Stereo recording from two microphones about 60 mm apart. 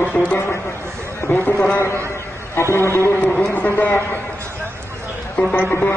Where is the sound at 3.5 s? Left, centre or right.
Left.